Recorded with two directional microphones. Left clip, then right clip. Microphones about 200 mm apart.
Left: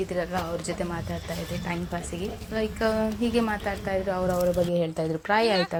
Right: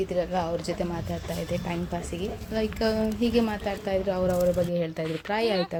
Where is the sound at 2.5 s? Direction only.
10° right (ahead or behind).